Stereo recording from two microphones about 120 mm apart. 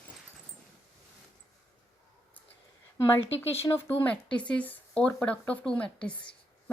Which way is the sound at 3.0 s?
20° left (ahead or behind).